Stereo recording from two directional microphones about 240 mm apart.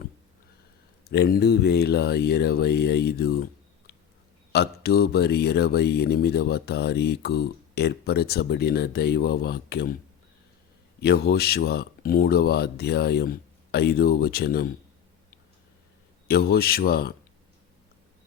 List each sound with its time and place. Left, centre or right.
1.0 s speech: left
4.5 s speech: left
11.0 s speech: left
16.2 s speech: left